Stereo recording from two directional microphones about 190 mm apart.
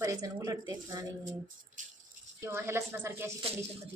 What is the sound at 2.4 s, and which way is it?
Speech, 15° right (ahead or behind).